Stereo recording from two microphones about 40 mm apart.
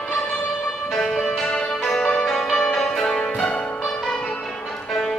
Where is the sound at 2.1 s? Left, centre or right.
Left.